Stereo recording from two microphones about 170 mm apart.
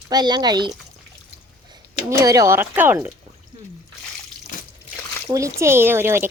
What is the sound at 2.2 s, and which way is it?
Speech, 20° right (ahead or behind).